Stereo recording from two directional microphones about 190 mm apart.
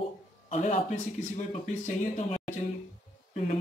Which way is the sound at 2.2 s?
35° left (ahead or behind).